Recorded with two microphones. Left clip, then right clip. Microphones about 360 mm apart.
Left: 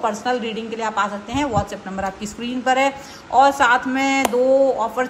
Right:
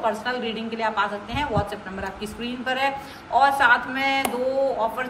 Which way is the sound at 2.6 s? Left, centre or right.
Centre.